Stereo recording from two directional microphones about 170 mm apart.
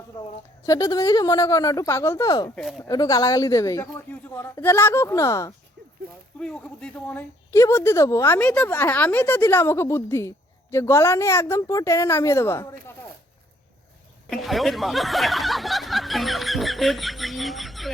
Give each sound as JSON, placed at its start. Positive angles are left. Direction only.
{"t": 0.2, "sound": "a woman's voice", "side_deg": 20}
{"t": 2.6, "sound": "speech", "side_deg": 0}
{"t": 2.8, "sound": "speech", "side_deg": 20}
{"t": 6.4, "sound": "speech", "side_deg": 5}
{"t": 14.3, "sound": "speech", "side_deg": 0}